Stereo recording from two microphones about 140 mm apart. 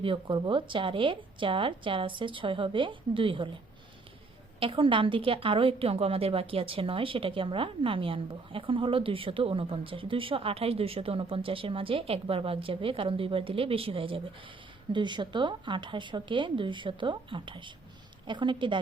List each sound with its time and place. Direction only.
0.0 s a woman's voice: 40° right (ahead or behind)
4.6 s a woman's voice: 40° right (ahead or behind)